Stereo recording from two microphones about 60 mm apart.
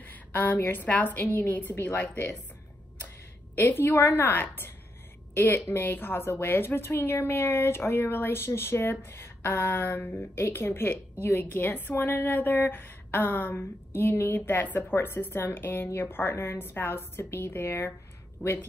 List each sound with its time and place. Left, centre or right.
0.0 s a sound: left
0.8 s a woman's voice: left
3.5 s a woman's voice: left
9.8 s a woman's voice: left